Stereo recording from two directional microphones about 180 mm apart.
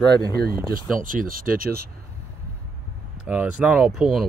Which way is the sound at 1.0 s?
50° right (ahead or behind).